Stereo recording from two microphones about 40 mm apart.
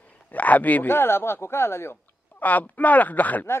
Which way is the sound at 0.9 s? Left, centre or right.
Left.